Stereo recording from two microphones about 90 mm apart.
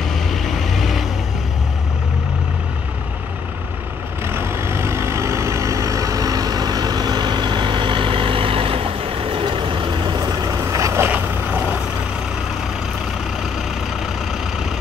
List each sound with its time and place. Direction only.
0.1 s vehicle: centre (ahead or behind)
4.3 s vehicle: 30° right (ahead or behind)